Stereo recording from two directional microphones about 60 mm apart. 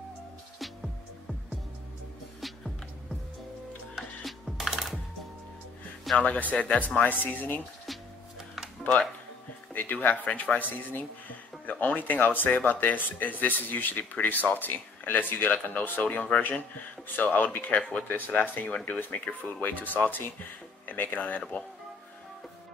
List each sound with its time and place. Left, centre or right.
3.9 s music: centre
6.1 s speech: left
9.8 s speech: left
10.9 s music: left
11.7 s speech: left